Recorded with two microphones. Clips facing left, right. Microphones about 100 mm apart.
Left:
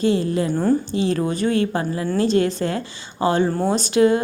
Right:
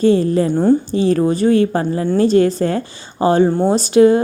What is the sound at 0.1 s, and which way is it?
A woman's voice, 35° right (ahead or behind).